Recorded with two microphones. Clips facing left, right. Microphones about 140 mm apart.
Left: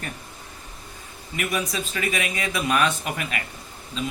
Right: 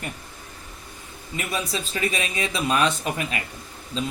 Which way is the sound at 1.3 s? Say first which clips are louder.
Left 1 dB; 30° right (ahead or behind).